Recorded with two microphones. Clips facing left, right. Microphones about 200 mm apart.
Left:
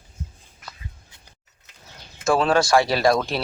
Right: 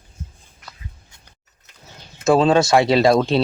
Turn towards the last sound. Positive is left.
turn(degrees=-25)  # may be behind; listen again after turning